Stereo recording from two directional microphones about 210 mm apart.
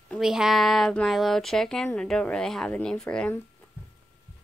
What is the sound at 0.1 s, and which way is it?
Speech, centre (ahead or behind).